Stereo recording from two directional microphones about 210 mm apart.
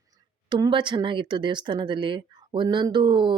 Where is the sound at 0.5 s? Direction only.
20° right (ahead or behind).